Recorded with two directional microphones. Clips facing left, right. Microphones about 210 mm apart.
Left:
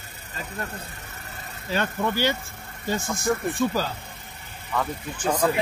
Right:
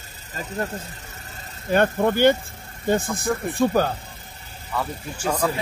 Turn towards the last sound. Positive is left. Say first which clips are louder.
# left 1 dB
turn(degrees=5)  # may be behind; listen again after turning